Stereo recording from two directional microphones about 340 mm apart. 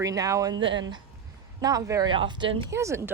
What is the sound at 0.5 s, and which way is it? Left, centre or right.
Speech, right.